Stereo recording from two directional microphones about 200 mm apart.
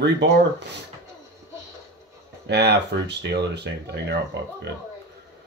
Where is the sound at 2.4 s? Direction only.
55° right (ahead or behind).